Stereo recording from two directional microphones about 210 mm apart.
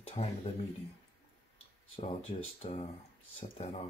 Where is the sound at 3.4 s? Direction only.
30° left (ahead or behind).